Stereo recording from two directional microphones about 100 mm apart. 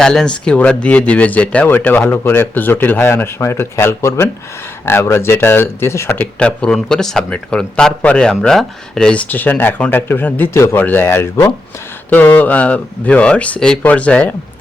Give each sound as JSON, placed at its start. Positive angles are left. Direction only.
{"t": 0.0, "sound": "speech", "side_deg": 5}
{"t": 6.4, "sound": "speech", "side_deg": 10}